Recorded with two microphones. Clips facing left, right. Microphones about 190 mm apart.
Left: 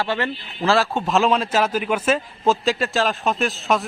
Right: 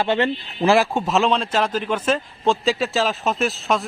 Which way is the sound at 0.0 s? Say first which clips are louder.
Right 4 dB; 20° right (ahead or behind).